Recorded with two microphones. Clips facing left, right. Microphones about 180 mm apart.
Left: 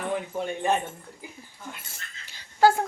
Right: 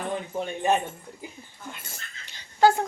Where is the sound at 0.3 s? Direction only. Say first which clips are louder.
Right 3 dB; 15° right (ahead or behind).